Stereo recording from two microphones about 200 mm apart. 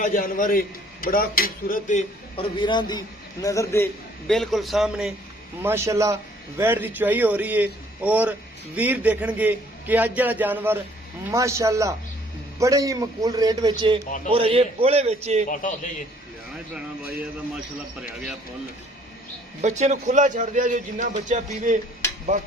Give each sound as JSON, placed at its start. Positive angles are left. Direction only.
{"t": 0.0, "sound": "a man's voice", "side_deg": 40}
{"t": 2.3, "sound": "a man's voice", "side_deg": 25}
{"t": 4.3, "sound": "a man's voice", "side_deg": 0}
{"t": 15.4, "sound": "a man's voice", "side_deg": 40}
{"t": 19.6, "sound": "speech", "side_deg": -35}